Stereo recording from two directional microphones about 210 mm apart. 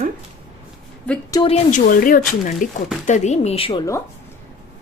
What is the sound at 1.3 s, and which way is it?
Speech, 25° left (ahead or behind).